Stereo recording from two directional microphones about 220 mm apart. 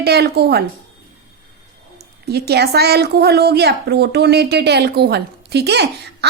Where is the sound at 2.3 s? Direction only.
45° right (ahead or behind).